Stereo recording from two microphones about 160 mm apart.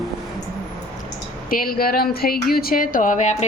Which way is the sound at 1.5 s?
65° left (ahead or behind).